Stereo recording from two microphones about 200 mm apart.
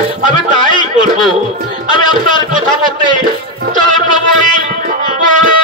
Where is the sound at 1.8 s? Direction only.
25° left (ahead or behind).